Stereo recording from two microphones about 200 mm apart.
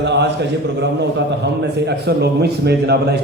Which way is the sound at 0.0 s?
60° right (ahead or behind).